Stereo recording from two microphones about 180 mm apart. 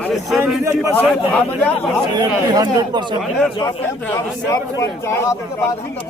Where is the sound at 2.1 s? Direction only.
20° right (ahead or behind).